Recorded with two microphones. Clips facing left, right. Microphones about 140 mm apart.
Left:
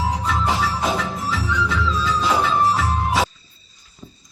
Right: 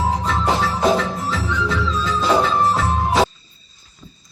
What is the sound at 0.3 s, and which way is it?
Music, centre (ahead or behind).